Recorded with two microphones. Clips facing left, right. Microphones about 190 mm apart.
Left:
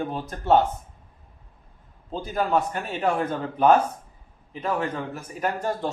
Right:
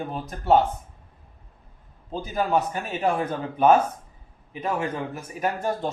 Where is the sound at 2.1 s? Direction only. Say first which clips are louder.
Even; 10° right (ahead or behind).